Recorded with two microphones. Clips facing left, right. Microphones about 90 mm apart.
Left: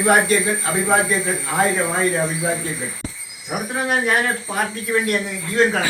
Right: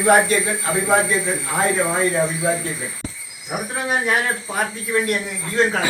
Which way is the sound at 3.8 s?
Centre (ahead or behind).